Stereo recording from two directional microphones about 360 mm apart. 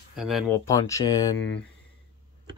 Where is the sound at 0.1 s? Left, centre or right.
Centre.